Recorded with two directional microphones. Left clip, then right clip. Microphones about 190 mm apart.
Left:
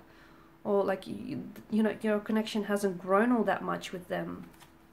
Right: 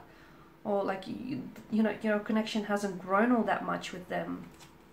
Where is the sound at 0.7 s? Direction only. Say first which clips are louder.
Left 3 dB; 45° left (ahead or behind).